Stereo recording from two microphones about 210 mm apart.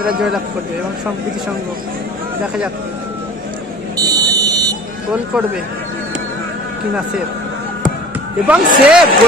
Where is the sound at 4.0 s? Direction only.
15° right (ahead or behind).